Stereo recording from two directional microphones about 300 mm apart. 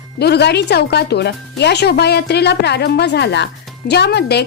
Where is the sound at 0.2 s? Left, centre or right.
Left.